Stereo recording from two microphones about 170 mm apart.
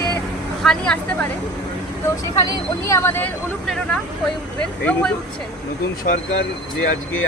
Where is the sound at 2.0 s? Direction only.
20° left (ahead or behind).